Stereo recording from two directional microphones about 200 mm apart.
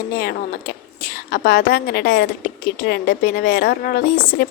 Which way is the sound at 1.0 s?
50° left (ahead or behind).